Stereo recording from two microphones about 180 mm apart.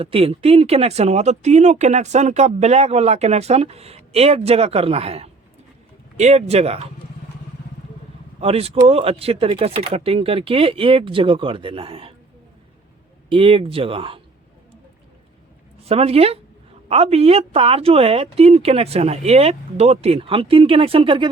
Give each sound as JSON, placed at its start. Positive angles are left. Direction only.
{"t": 0.0, "sound": "speech", "side_deg": -30}
{"t": 8.4, "sound": "speech", "side_deg": -35}
{"t": 13.3, "sound": "speech", "side_deg": -30}
{"t": 15.8, "sound": "speech", "side_deg": -35}